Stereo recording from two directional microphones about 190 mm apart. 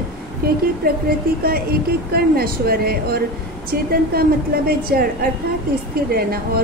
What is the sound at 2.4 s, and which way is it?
A woman's voice, 55° right (ahead or behind).